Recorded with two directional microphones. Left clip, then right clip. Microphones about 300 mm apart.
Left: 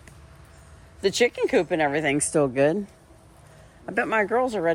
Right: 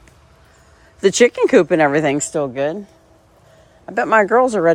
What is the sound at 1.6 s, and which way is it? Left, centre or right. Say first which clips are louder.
Speech: right 9 dB; right.